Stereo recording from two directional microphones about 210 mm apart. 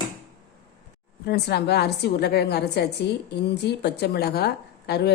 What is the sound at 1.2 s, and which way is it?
A woman's voice, 50° left (ahead or behind).